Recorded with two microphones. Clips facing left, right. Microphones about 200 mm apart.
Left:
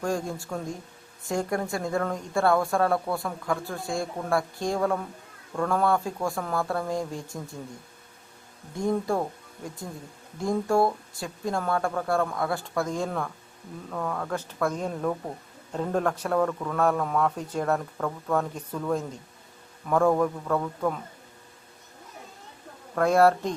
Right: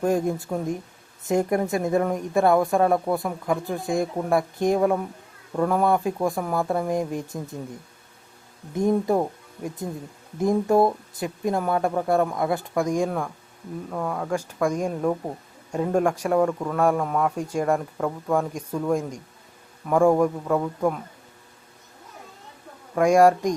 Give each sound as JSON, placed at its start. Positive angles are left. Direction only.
{"t": 0.0, "sound": "speech", "side_deg": -20}
{"t": 8.7, "sound": "speech", "side_deg": -20}
{"t": 10.4, "sound": "a man's voice", "side_deg": -20}
{"t": 23.0, "sound": "a man's voice", "side_deg": -15}